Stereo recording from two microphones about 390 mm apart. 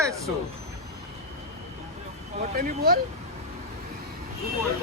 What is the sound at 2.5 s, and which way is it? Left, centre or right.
Speech, right.